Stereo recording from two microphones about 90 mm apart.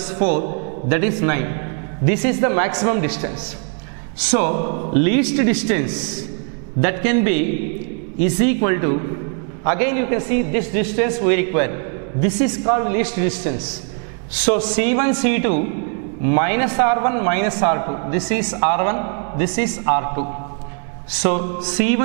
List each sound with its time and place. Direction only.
0.1 s a man's voice: 10° right (ahead or behind)